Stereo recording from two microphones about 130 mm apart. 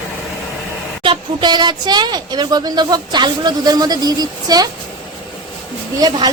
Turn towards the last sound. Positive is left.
turn(degrees=-30)  # may be behind; listen again after turning